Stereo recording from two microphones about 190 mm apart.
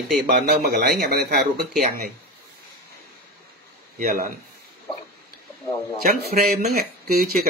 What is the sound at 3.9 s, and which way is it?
Speech, 45° right (ahead or behind).